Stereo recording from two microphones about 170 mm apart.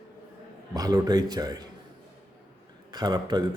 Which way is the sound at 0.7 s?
20° right (ahead or behind).